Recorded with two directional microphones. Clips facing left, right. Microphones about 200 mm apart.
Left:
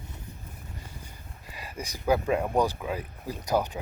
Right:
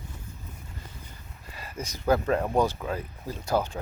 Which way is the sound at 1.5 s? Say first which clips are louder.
Right 1 dB; 15° left (ahead or behind).